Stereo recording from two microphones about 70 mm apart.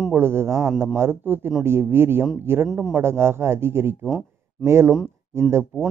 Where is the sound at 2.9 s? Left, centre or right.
Right.